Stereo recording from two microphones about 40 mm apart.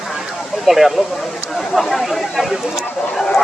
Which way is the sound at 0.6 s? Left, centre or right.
Centre.